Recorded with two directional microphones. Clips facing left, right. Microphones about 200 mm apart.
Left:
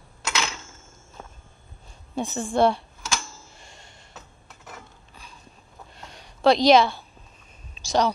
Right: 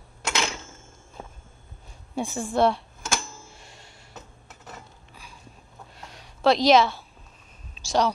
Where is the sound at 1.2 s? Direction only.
15° right (ahead or behind).